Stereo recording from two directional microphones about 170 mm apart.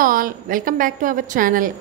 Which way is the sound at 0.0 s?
55° right (ahead or behind).